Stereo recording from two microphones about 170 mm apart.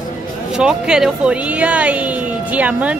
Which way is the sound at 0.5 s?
5° right (ahead or behind).